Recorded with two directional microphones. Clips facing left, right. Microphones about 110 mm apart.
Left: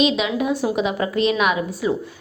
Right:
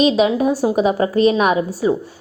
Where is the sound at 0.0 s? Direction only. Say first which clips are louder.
Right 5 dB; 35° right (ahead or behind).